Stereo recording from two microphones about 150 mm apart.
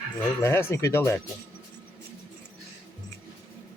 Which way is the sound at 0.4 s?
15° left (ahead or behind).